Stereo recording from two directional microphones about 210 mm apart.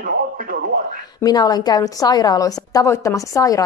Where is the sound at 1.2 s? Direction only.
20° left (ahead or behind).